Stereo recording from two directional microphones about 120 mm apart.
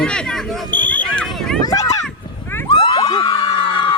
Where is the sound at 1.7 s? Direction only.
30° left (ahead or behind).